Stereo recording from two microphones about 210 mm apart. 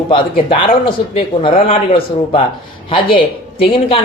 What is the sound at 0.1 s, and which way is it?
Speech, 25° left (ahead or behind).